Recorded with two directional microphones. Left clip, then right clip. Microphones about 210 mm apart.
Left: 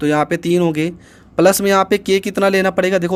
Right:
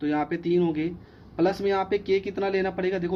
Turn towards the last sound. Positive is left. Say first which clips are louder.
# left 12 dB
turn(degrees=55)  # may be behind; listen again after turning